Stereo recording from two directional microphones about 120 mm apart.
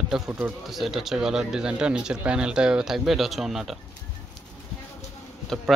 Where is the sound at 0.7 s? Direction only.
Centre (ahead or behind).